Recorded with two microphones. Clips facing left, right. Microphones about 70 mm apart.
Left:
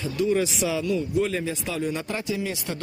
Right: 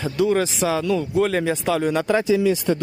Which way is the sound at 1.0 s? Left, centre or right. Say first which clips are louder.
Right 5 dB; right.